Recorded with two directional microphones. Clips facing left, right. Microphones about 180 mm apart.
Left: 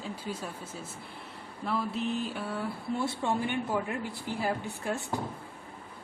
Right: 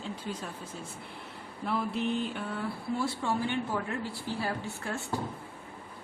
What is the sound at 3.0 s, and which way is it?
Speech, 20° left (ahead or behind).